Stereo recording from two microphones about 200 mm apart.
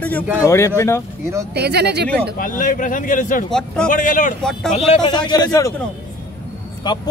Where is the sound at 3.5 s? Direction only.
5° left (ahead or behind).